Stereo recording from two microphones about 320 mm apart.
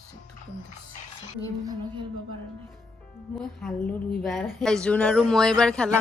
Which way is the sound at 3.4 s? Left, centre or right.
Centre.